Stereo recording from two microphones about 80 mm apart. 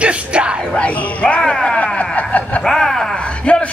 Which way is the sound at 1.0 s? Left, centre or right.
Centre.